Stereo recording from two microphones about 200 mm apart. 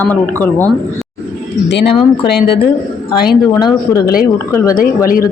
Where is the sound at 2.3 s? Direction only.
55° left (ahead or behind).